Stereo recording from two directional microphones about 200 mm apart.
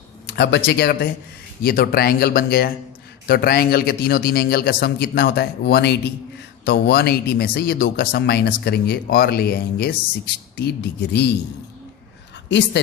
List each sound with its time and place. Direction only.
0.3 s speech: 60° left (ahead or behind)
12.5 s speech: 60° left (ahead or behind)